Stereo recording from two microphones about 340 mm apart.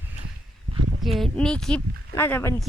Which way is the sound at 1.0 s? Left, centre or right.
Centre.